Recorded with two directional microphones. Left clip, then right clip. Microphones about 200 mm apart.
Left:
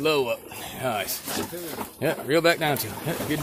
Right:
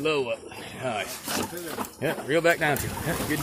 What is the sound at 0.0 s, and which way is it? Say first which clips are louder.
Speech: left 3 dB; 25° left (ahead or behind).